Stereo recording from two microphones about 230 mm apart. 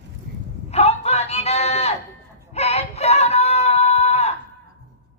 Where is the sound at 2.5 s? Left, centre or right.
Left.